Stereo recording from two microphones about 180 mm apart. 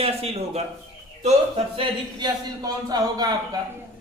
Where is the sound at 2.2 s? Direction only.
20° right (ahead or behind).